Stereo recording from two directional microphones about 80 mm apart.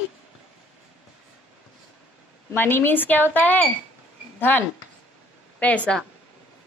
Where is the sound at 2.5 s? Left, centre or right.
Left.